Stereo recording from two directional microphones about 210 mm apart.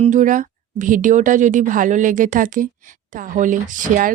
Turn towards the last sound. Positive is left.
turn(degrees=-40)  # may be behind; listen again after turning